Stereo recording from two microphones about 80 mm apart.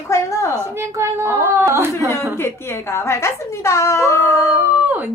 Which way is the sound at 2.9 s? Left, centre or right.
Left.